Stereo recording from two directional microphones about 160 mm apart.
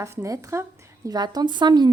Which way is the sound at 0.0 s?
20° right (ahead or behind).